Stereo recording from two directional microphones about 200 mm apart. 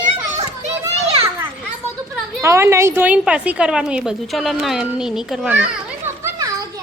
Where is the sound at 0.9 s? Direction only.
30° right (ahead or behind).